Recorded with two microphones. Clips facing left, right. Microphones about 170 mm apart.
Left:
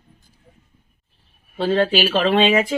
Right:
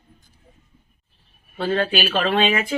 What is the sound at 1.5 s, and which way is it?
Speech, 25° left (ahead or behind).